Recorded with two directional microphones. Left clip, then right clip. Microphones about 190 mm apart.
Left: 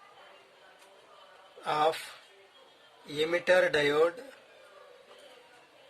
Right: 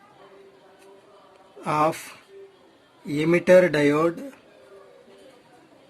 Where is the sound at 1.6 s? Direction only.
35° right (ahead or behind).